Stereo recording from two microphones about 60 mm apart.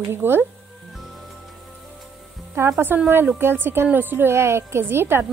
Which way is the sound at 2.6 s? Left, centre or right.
Right.